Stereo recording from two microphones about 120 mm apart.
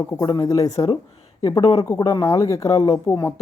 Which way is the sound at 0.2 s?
30° left (ahead or behind).